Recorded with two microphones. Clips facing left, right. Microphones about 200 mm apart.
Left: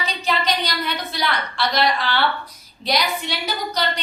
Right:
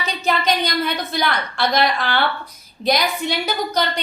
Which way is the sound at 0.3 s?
50° right (ahead or behind).